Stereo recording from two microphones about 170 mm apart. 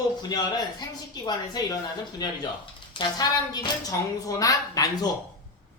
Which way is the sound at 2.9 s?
25° left (ahead or behind).